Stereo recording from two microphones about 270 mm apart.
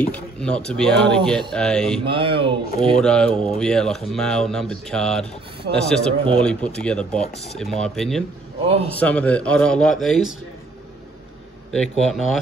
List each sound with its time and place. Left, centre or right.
0.0 s speech: centre
2.0 s speech: centre
3.0 s speech: centre
8.6 s speech: right
9.0 s speech: centre
11.7 s speech: centre